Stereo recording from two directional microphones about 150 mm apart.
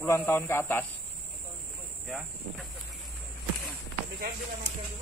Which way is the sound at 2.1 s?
Centre (ahead or behind).